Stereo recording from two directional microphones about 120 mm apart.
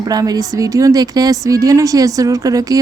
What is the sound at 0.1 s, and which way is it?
A woman's voice, 30° right (ahead or behind).